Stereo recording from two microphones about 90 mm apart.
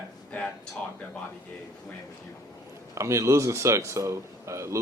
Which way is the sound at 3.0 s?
35° right (ahead or behind).